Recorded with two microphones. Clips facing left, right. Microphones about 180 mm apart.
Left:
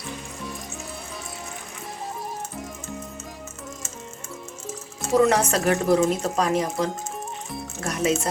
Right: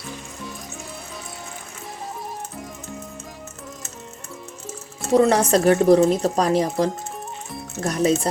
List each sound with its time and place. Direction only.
5.1 s speech: 35° right (ahead or behind)